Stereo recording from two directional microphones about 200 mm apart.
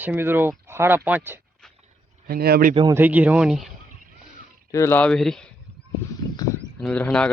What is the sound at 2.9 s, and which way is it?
Speech, 10° right (ahead or behind).